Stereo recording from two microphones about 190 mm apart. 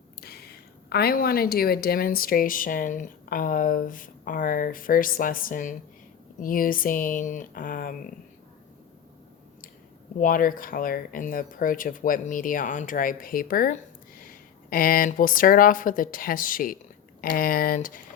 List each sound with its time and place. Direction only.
0.2 s speech: 55° left (ahead or behind)
10.2 s speech: 45° left (ahead or behind)